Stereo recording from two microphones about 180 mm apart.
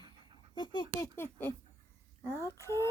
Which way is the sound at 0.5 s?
25° left (ahead or behind).